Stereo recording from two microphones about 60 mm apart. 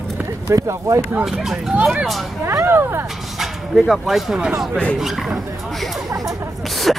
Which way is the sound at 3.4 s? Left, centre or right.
Centre.